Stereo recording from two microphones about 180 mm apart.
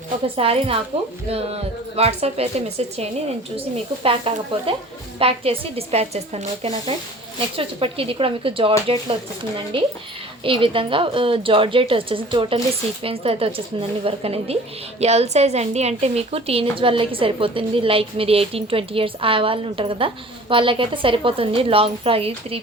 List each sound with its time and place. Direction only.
0.3 s a woman's voice: 35° right (ahead or behind)
2.0 s a woman's voice: 35° right (ahead or behind)